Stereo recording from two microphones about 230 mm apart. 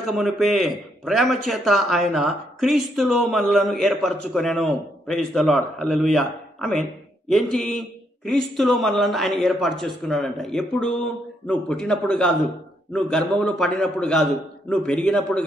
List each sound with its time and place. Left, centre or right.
0.0 s a man's voice: centre